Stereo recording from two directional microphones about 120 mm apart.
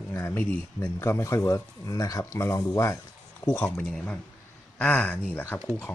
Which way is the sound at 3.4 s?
15° left (ahead or behind).